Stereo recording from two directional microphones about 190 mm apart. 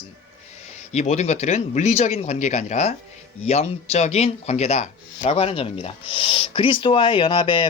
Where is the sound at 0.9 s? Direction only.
35° left (ahead or behind).